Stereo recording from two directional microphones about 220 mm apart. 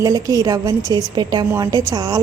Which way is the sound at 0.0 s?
15° right (ahead or behind).